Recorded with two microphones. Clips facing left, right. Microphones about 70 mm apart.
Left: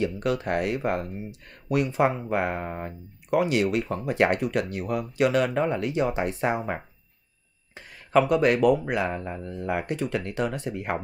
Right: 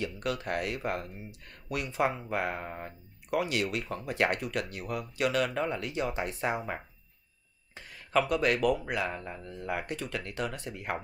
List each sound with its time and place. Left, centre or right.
0.0 s speech: left
7.7 s a sound: left
8.3 s speech: left